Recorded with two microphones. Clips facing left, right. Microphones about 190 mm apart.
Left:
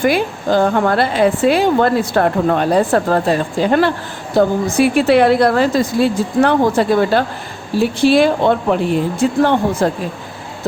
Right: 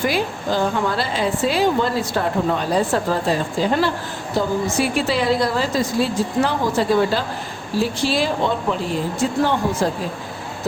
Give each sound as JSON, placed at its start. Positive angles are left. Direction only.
{"t": 0.0, "sound": "a woman's voice", "side_deg": 60}